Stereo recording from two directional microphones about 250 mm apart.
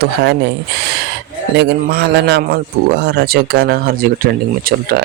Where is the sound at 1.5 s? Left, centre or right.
Right.